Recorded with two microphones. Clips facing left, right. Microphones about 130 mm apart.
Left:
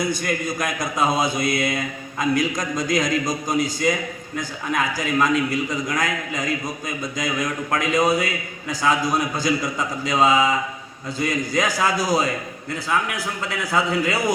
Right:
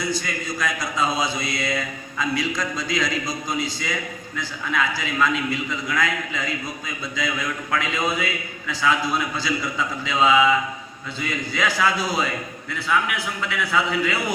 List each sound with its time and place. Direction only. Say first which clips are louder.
0.0 s a man's voice: left 4 dB; 50° left (ahead or behind)